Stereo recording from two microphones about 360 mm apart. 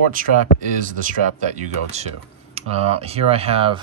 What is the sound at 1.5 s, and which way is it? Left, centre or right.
Speech, centre.